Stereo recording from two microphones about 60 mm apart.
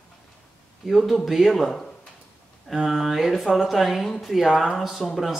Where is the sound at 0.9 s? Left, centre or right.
Centre.